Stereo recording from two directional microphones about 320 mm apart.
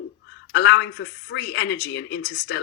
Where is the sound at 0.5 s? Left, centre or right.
Left.